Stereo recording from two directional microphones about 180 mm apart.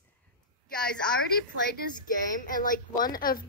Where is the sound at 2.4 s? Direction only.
50° left (ahead or behind).